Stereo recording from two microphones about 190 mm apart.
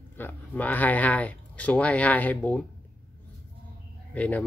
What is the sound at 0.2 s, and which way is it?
Speech, 10° left (ahead or behind).